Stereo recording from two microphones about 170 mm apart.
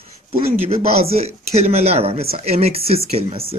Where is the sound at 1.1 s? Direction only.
35° right (ahead or behind).